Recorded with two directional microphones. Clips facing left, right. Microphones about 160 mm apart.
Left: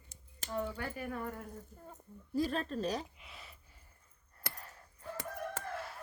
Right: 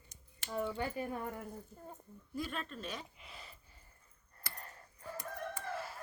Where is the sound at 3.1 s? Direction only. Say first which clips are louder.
Right 1 dB; centre (ahead or behind).